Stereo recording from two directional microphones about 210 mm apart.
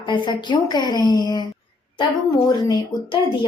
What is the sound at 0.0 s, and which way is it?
A woman's voice, 20° left (ahead or behind).